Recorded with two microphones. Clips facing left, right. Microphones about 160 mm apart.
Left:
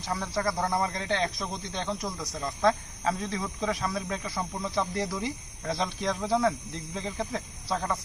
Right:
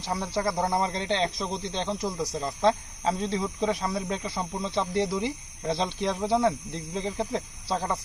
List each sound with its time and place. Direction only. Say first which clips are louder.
0.3 s speech: right 2 dB; 25° right (ahead or behind)